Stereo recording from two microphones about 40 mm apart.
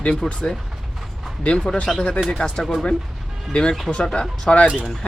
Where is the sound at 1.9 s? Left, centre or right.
Centre.